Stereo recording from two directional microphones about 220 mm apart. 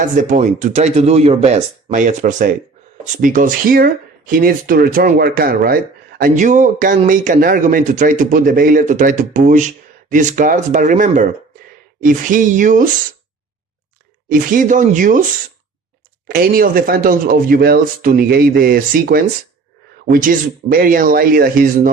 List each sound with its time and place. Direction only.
0.0 s speech: 35° right (ahead or behind)
14.3 s speech: 40° right (ahead or behind)
16.3 s speech: 40° right (ahead or behind)